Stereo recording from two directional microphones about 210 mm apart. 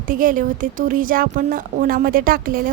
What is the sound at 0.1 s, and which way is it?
A woman's voice, 40° right (ahead or behind).